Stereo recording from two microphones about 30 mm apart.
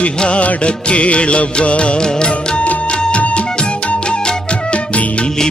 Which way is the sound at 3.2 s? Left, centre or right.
Left.